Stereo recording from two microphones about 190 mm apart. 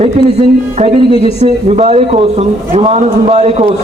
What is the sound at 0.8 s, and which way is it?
A man's voice, 35° right (ahead or behind).